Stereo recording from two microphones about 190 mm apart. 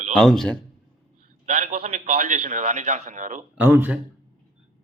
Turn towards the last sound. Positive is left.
turn(degrees=-10)  # may be behind; listen again after turning